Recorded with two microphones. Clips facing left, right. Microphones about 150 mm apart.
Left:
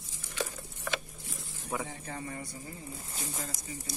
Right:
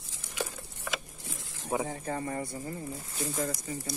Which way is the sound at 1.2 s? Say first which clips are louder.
Right 2 dB; 90° right.